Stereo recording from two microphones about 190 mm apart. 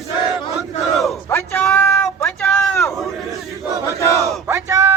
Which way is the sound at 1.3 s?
15° left (ahead or behind).